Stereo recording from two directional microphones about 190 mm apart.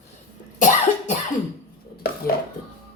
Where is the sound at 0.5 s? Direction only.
40° left (ahead or behind).